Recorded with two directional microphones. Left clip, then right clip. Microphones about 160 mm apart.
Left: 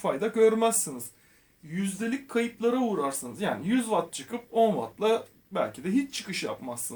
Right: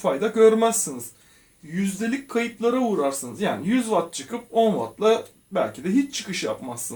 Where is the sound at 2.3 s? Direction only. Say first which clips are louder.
Right 4 dB; 25° left (ahead or behind).